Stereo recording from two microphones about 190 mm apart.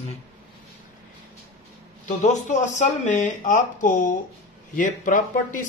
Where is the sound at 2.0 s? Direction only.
40° left (ahead or behind).